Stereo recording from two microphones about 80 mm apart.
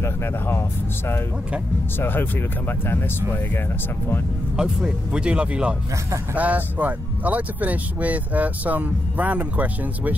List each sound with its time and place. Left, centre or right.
0.0 s speech: left
4.6 s speech: centre